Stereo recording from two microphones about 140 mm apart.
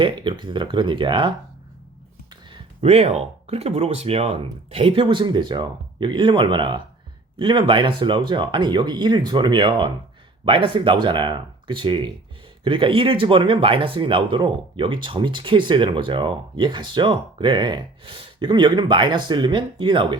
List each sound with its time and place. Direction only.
0.0 s speech: 35° right (ahead or behind)
2.8 s speech: 45° right (ahead or behind)